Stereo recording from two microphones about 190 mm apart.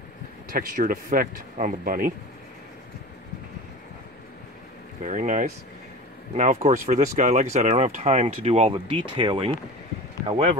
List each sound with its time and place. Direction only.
0.5 s speech: 50° right (ahead or behind)
5.0 s speech: 40° right (ahead or behind)